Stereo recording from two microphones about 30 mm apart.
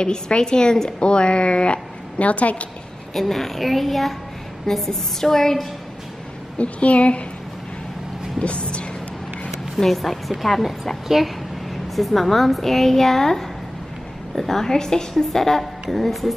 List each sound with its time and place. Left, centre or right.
0.0 s a woman's voice: left
2.1 s a woman's voice: left
3.2 s a woman's voice: centre
4.7 s a woman's voice: centre
6.6 s a woman's voice: left
8.4 s a woman's voice: left
9.8 s speech: centre
11.9 s a woman's voice: centre